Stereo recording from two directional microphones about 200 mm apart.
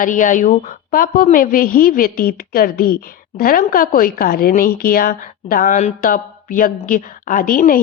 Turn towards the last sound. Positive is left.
turn(degrees=45)  # may be behind; listen again after turning